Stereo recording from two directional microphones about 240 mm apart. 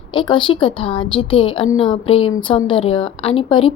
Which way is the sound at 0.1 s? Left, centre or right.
Left.